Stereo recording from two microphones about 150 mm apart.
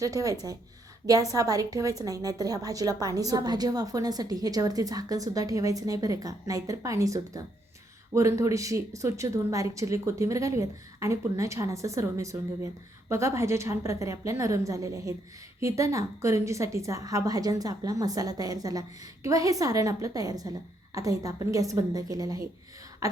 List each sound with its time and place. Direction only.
0.0 s a woman's voice: 25° right (ahead or behind)